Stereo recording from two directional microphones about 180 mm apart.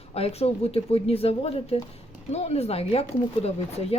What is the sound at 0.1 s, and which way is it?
Speech, 35° left (ahead or behind).